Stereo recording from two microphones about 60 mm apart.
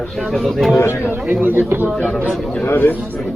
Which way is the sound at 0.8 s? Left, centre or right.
Left.